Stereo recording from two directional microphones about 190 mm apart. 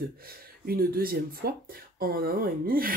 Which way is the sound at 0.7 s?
50° right (ahead or behind).